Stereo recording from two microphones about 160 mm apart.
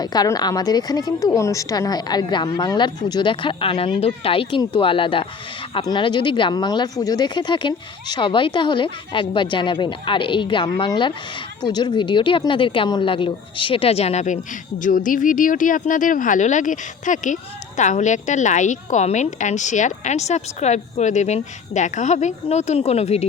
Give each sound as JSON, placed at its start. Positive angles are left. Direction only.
{"t": 0.0, "sound": "a woman's voice", "side_deg": 25}
{"t": 14.8, "sound": "a woman's voice", "side_deg": 55}